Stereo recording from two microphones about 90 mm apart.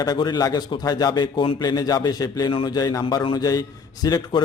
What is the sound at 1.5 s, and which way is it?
Speech, 45° left (ahead or behind).